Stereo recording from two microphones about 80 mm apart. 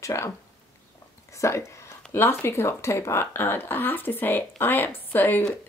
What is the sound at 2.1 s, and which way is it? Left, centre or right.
Speech, left.